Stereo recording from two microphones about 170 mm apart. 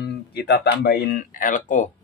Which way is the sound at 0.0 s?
70° left (ahead or behind).